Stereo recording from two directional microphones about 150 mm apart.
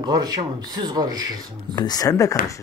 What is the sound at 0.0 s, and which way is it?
Speech, 25° right (ahead or behind).